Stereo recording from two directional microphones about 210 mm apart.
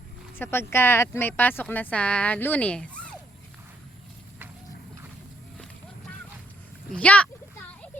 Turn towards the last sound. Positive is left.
turn(degrees=5)  # may be behind; listen again after turning